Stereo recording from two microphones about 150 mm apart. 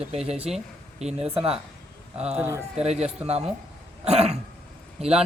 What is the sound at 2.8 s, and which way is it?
Speech, 45° right (ahead or behind).